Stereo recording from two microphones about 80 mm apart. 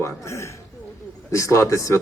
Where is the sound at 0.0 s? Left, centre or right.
Left.